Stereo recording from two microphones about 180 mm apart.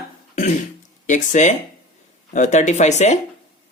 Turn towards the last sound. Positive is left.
turn(degrees=40)  # may be behind; listen again after turning